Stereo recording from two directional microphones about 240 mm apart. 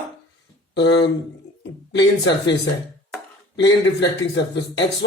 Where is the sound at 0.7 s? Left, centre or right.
Left.